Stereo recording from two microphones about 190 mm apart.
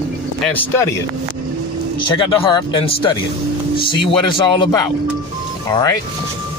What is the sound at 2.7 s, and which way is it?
Speech, 25° left (ahead or behind).